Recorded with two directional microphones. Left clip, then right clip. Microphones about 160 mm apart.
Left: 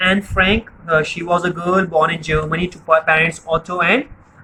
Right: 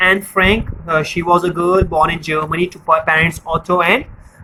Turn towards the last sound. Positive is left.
turn(degrees=-45)  # may be behind; listen again after turning